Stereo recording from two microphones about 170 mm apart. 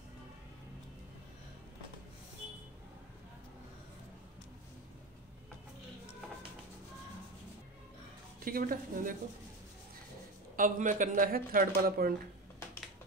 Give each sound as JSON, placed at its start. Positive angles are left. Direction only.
{"t": 8.5, "sound": "a woman's voice", "side_deg": -55}
{"t": 10.5, "sound": "speech", "side_deg": -50}